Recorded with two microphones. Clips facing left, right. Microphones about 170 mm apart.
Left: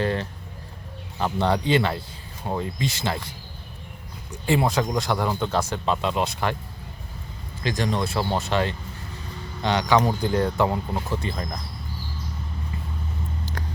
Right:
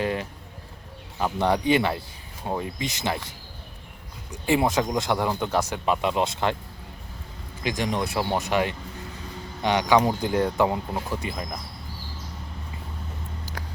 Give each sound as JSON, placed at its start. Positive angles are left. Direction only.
{"t": 0.0, "sound": "speech", "side_deg": -10}
{"t": 4.3, "sound": "speech", "side_deg": -20}
{"t": 7.6, "sound": "speech", "side_deg": -15}